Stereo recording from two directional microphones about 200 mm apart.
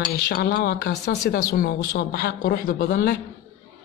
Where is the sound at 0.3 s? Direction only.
50° left (ahead or behind).